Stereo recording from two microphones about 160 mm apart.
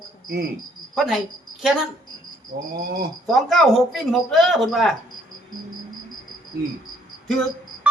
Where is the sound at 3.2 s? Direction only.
Centre (ahead or behind).